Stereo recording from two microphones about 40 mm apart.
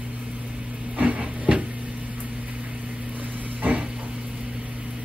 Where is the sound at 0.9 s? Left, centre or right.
Right.